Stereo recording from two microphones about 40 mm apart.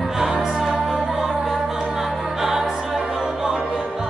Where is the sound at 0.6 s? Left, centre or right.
Centre.